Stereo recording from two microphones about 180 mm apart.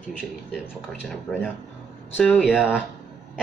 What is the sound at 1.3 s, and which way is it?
Speech, centre (ahead or behind).